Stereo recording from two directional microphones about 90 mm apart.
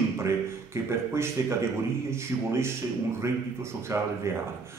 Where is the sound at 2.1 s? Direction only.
30° right (ahead or behind).